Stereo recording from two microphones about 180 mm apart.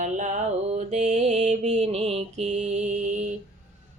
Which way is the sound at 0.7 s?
40° right (ahead or behind).